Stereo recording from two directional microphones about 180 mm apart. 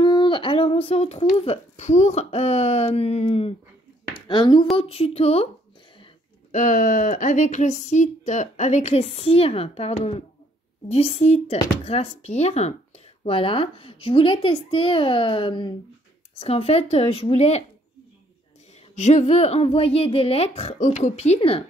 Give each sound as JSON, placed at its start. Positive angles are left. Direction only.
{"t": 0.0, "sound": "speech", "side_deg": 25}
{"t": 6.5, "sound": "speech", "side_deg": 45}
{"t": 18.9, "sound": "speech", "side_deg": 40}